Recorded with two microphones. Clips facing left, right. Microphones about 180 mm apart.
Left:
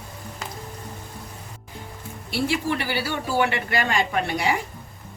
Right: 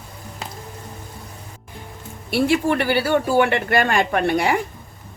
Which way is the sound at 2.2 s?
60° right (ahead or behind).